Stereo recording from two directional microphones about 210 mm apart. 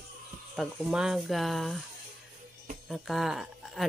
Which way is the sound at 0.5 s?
Centre (ahead or behind).